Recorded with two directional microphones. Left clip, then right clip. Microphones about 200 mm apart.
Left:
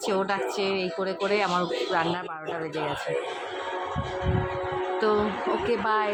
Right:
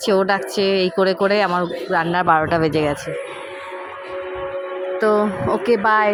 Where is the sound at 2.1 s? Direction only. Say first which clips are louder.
Right 17 dB; 45° right (ahead or behind).